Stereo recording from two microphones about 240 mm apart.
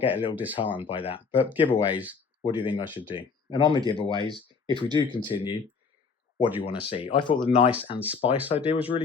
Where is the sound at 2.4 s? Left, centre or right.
Left.